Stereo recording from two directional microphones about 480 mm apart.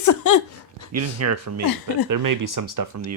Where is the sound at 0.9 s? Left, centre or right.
Right.